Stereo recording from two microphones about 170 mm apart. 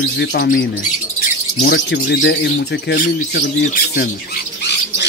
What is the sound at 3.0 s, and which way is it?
Speech, 60° left (ahead or behind).